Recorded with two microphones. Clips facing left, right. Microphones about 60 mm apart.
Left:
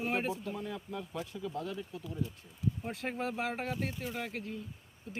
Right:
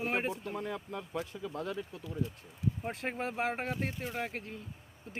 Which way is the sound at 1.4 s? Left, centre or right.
Right.